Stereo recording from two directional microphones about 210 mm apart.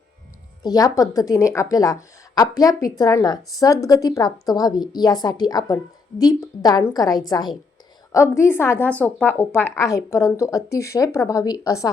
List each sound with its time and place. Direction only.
0.6 s a woman's voice: 15° left (ahead or behind)